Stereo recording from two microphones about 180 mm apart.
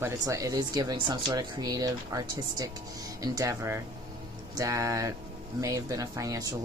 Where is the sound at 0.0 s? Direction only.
15° right (ahead or behind).